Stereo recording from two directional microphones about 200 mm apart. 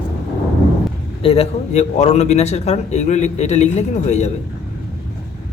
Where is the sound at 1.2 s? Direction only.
30° left (ahead or behind).